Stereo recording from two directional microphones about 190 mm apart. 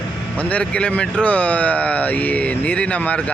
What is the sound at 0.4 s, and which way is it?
Speech, 5° left (ahead or behind).